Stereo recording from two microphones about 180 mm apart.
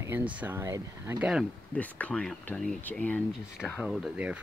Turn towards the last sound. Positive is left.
turn(degrees=-5)  # may be behind; listen again after turning